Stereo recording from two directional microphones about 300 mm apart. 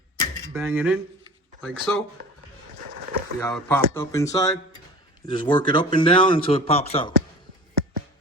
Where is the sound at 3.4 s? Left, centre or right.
Centre.